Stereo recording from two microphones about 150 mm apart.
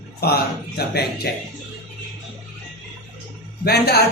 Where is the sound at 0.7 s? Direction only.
90° left.